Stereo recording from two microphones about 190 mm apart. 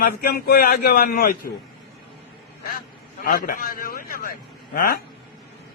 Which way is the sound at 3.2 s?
50° left (ahead or behind).